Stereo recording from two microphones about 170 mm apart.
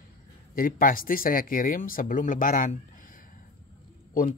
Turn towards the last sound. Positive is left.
turn(degrees=55)  # may be behind; listen again after turning